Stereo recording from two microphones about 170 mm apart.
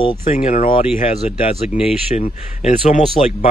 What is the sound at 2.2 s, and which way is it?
Speech, 45° left (ahead or behind).